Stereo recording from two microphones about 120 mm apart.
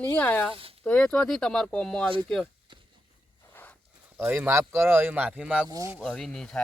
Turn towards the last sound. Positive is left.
turn(degrees=5)  # may be behind; listen again after turning